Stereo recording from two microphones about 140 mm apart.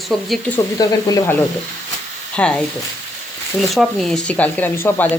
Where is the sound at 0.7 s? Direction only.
25° left (ahead or behind).